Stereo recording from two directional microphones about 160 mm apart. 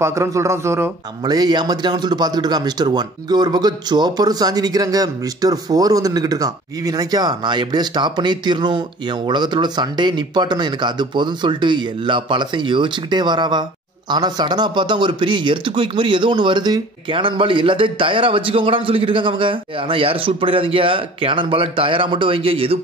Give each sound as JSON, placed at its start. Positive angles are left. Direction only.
{"t": 0.0, "sound": "a man's voice", "side_deg": -20}